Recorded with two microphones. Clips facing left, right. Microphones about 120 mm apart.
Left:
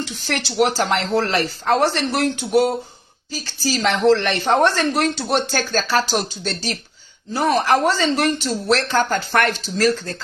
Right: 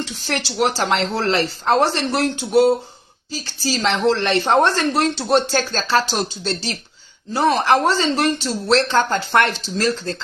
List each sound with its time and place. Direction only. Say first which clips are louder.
0.2 s a woman's voice: left 1 dB; 35° right (ahead or behind)
3.3 s a woman's voice: even; 30° right (ahead or behind)